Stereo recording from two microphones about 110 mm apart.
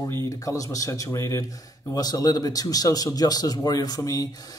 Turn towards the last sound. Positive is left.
turn(degrees=30)  # may be behind; listen again after turning